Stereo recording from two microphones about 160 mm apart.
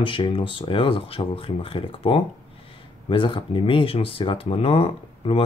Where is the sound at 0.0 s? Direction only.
30° left (ahead or behind).